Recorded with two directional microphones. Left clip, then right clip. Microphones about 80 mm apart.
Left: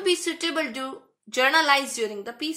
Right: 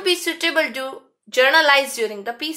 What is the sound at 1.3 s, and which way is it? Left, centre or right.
A woman's voice, centre.